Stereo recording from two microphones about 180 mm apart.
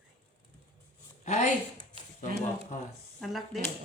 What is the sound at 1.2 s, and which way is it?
Speech, 45° left (ahead or behind).